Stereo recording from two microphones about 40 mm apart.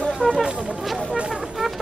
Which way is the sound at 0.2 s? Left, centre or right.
Left.